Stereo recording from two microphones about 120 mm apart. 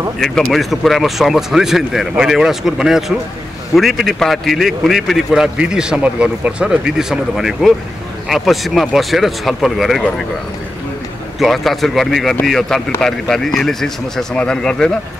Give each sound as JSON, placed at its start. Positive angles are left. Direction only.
{"t": 0.2, "sound": "a man's voice", "side_deg": 0}
{"t": 11.3, "sound": "a man's voice", "side_deg": 0}